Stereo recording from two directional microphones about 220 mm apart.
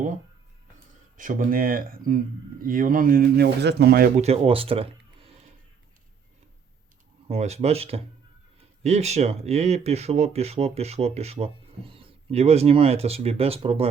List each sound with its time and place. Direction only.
1.1 s speech: 35° right (ahead or behind)
4.2 s speech: 25° right (ahead or behind)
7.3 s speech: 30° right (ahead or behind)